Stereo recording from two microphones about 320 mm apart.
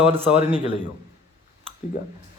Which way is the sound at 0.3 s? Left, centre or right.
Centre.